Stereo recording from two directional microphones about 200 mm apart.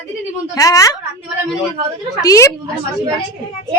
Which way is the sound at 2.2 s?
15° left (ahead or behind).